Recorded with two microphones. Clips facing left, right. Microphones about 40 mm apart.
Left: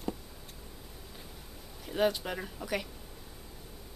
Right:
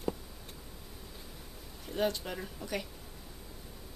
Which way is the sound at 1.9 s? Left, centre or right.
Centre.